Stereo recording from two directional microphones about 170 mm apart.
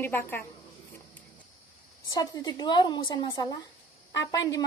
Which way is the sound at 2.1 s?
25° left (ahead or behind).